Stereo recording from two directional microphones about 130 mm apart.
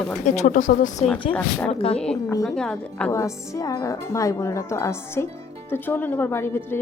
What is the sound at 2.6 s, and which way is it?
Speech, 5° left (ahead or behind).